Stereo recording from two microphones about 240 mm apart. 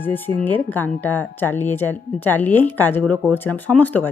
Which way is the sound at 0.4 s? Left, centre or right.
Centre.